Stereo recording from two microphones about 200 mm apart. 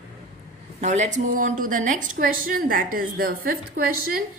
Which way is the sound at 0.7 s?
35° right (ahead or behind).